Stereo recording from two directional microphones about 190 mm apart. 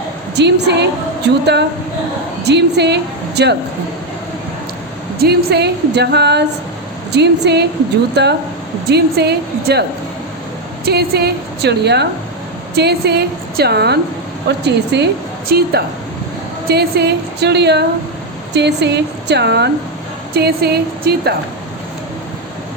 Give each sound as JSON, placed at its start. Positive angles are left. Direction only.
{"t": 0.3, "sound": "a woman's voice", "side_deg": -65}
{"t": 5.2, "sound": "a woman's voice", "side_deg": -60}
{"t": 10.8, "sound": "a woman's voice", "side_deg": -55}